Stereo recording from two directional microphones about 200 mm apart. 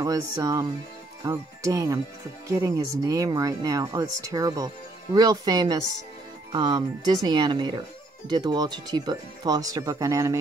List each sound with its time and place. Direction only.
0.0 s speech: 20° right (ahead or behind)